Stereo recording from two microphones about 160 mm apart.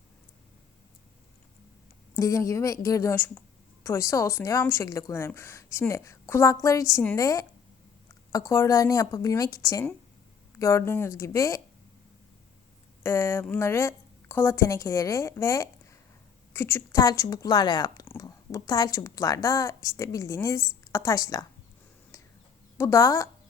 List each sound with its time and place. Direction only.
2.1 s a woman's voice: 20° left (ahead or behind)
13.0 s a woman's voice: 15° left (ahead or behind)
22.8 s a woman's voice: 20° left (ahead or behind)